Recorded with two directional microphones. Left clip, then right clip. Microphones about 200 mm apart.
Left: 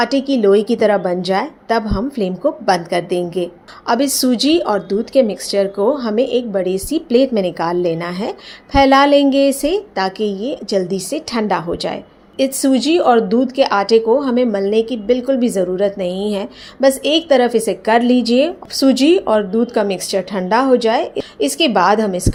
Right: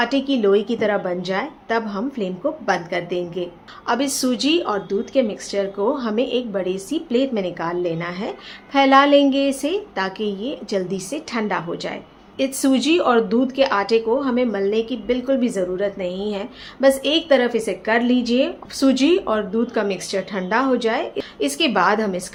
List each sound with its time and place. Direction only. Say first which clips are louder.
0.0 s a woman's voice: left 4 dB; 20° left (ahead or behind)